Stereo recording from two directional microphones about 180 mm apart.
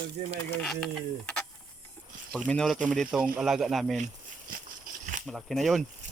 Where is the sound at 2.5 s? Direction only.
5° left (ahead or behind).